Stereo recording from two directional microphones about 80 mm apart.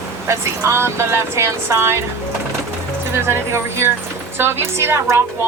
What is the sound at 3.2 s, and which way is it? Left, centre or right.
Speech, right.